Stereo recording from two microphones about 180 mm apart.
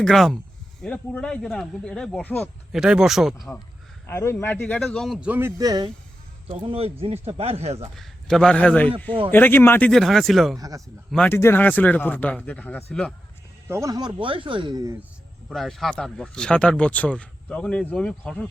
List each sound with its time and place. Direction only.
0.0 s speech: centre (ahead or behind)
2.7 s speech: 5° right (ahead or behind)
4.0 s speech: 15° left (ahead or behind); by 7.9 s 35° right (ahead or behind)
7.9 s speech: 5° left (ahead or behind)
10.6 s speech: 20° right (ahead or behind)
11.1 s speech: 5° left (ahead or behind)
13.7 s speech: 15° right (ahead or behind)
15.4 s speech: centre (ahead or behind)